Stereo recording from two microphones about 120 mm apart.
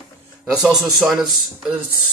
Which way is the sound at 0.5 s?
5° right (ahead or behind).